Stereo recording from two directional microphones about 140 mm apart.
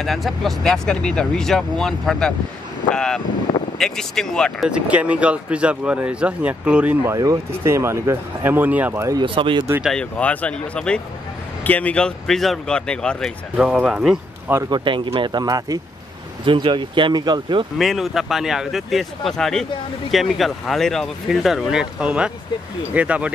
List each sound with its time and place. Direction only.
0.0 s speech: centre (ahead or behind)
4.6 s speech: 10° right (ahead or behind)
7.2 s speech: 20° right (ahead or behind)
9.2 s speech: 35° right (ahead or behind)
9.8 s speech: 5° left (ahead or behind)
13.6 s speech: 5° right (ahead or behind)
14.7 s speech: 35° right (ahead or behind)
17.7 s speech: centre (ahead or behind)